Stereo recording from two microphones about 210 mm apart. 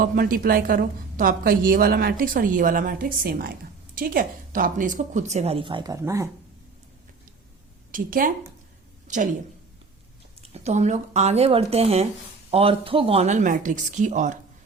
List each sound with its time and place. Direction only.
0.0 s a woman's voice: 45° right (ahead or behind); by 6.2 s 15° right (ahead or behind)
7.9 s a woman's voice: 40° right (ahead or behind)
10.4 s a woman's voice: 30° right (ahead or behind)